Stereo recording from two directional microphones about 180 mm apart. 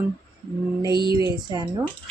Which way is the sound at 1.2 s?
20° right (ahead or behind).